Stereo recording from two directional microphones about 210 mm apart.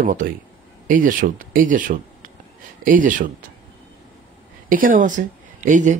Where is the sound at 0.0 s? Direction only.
40° right (ahead or behind).